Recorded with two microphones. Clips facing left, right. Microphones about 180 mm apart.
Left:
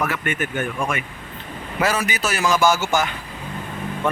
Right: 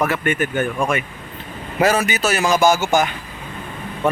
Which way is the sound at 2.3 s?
20° right (ahead or behind).